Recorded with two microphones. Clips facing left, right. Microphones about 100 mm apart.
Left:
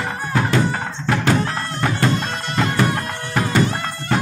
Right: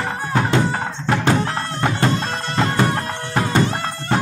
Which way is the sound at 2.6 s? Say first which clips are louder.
Even; 30° right (ahead or behind).